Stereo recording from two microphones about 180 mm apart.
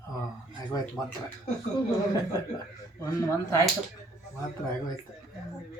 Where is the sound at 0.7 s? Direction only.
20° left (ahead or behind).